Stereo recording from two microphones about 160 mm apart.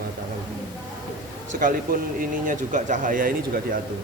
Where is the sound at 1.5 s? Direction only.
60° right (ahead or behind).